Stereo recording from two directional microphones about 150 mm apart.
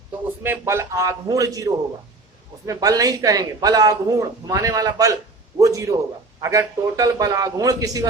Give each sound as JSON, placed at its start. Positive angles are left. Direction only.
{"t": 0.4, "sound": "a man's voice", "side_deg": -15}
{"t": 5.5, "sound": "a sound", "side_deg": -20}
{"t": 6.4, "sound": "a man's voice", "side_deg": -20}